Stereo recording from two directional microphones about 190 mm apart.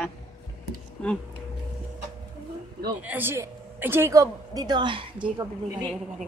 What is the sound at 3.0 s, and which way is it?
A woman's voice, 10° right (ahead or behind).